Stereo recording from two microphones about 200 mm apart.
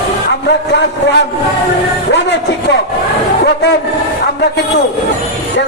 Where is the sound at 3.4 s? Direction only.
60° left (ahead or behind).